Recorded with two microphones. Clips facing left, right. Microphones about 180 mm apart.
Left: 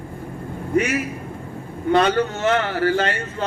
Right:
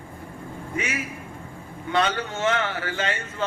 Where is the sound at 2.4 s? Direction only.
40° left (ahead or behind).